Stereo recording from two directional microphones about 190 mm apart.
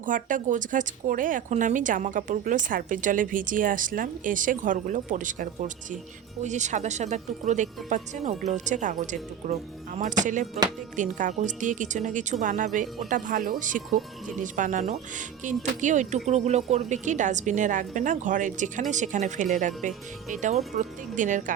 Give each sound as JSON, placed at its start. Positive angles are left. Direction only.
{"t": 0.0, "sound": "speech", "side_deg": -45}